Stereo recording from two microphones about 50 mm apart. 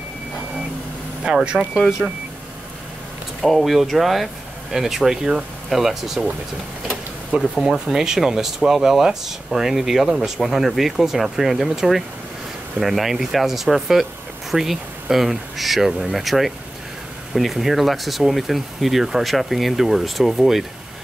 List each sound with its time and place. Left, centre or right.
1.2 s speech: centre
3.4 s speech: centre
7.6 s speech: centre